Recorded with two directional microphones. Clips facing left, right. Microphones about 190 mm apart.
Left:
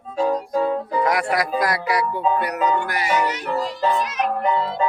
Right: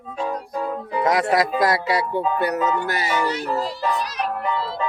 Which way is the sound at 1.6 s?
25° right (ahead or behind).